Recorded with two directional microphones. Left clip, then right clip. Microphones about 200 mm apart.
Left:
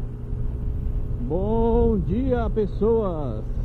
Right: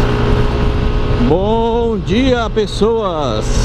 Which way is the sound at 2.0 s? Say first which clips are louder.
Right 11 dB; 5° right (ahead or behind).